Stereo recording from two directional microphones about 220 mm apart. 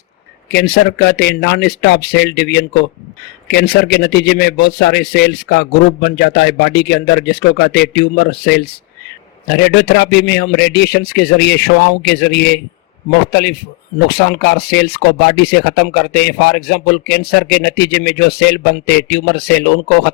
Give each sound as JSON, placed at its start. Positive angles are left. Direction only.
{"t": 0.5, "sound": "speech", "side_deg": 50}